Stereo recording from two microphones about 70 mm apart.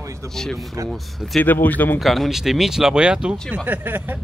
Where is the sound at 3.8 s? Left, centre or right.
Right.